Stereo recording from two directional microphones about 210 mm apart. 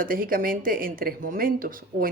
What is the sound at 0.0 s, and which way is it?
Speech, 40° right (ahead or behind).